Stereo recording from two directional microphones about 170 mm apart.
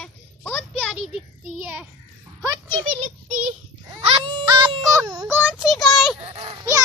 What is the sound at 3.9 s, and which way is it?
Baby cry, 30° right (ahead or behind).